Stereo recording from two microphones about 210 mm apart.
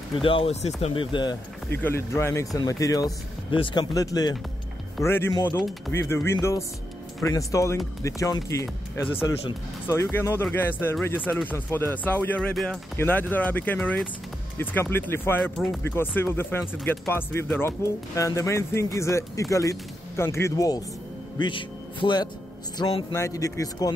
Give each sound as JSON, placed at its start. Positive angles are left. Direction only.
{"t": 0.2, "sound": "speech", "side_deg": 25}
{"t": 1.7, "sound": "speech", "side_deg": 10}
{"t": 10.1, "sound": "a man's voice", "side_deg": 10}